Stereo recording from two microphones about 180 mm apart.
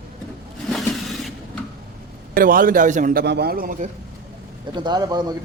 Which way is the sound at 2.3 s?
50° right (ahead or behind).